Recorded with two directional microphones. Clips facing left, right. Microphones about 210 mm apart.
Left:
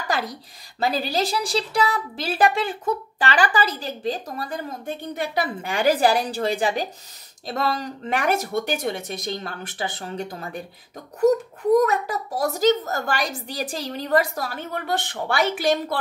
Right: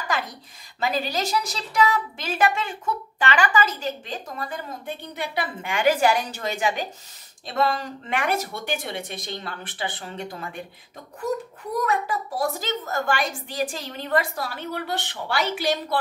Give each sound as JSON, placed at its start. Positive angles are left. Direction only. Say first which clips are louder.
{"t": 0.7, "sound": "a woman's voice", "louder": "left 3 dB", "side_deg": 35}
{"t": 11.8, "sound": "a woman's voice", "louder": "left 3 dB", "side_deg": 40}